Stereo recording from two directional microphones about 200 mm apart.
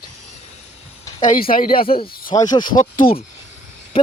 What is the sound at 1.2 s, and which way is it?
Speech, 45° left (ahead or behind).